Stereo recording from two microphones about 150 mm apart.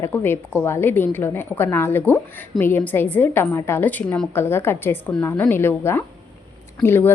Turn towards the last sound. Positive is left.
turn(degrees=15)  # may be behind; listen again after turning